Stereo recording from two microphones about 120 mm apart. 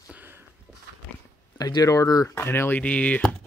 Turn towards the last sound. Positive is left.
turn(degrees=10)  # may be behind; listen again after turning